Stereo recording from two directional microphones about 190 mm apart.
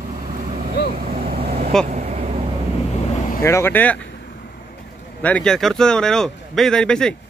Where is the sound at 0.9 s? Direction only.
45° right (ahead or behind).